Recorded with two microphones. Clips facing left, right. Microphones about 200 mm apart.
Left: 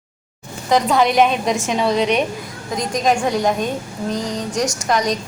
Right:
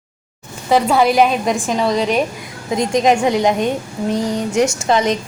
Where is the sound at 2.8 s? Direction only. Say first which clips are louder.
Right 4 dB; 25° right (ahead or behind).